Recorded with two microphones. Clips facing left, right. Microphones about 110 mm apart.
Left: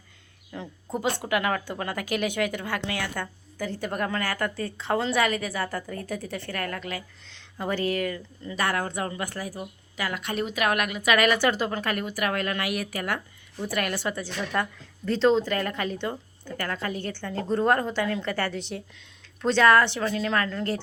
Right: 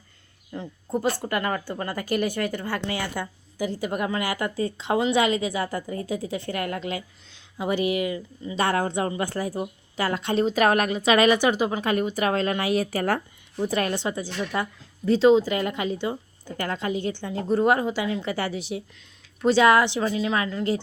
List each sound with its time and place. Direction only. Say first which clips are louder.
0.5 s a woman's voice: right 4 dB; 5° right (ahead or behind); by 7.0 s 25° right (ahead or behind)
7.3 s a woman's voice: right 3 dB; 10° right (ahead or behind)
8.5 s a woman's voice: right 4 dB; 25° right (ahead or behind)
13.6 s a woman's voice: right 4 dB; 25° right (ahead or behind)